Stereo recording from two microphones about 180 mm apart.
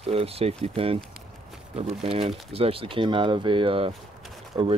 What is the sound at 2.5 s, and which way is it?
Speech, 30° right (ahead or behind).